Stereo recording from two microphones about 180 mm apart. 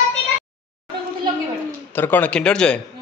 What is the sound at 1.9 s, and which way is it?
Speech, 10° left (ahead or behind).